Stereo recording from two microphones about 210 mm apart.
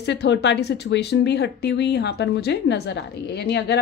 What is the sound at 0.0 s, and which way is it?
Speech, 55° left (ahead or behind).